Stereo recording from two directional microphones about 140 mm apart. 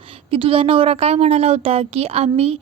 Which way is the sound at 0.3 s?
40° right (ahead or behind).